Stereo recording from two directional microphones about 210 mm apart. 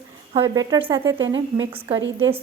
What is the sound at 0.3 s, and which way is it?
Speech, 20° right (ahead or behind).